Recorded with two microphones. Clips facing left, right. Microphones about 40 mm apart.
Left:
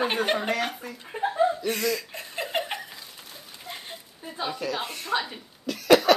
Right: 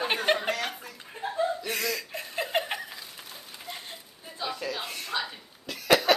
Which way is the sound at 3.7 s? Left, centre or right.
Centre.